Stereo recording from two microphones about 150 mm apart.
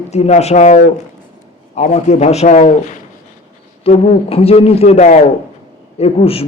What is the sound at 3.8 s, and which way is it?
A man's voice, 40° left (ahead or behind).